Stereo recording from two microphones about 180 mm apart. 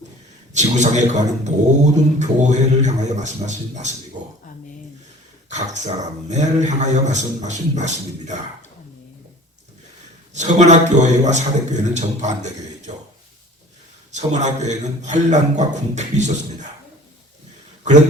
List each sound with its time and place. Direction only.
0.5 s speech: 40° right (ahead or behind)
5.5 s speech: 40° right (ahead or behind)
10.3 s speech: 40° right (ahead or behind)
14.2 s speech: 40° right (ahead or behind)